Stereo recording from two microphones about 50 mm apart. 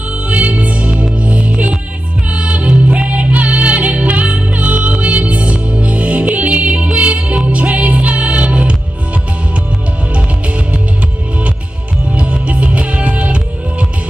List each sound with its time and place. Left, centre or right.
0.3 s music: right
12.2 s music: right